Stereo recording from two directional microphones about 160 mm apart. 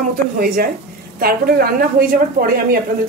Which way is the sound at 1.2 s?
70° right (ahead or behind).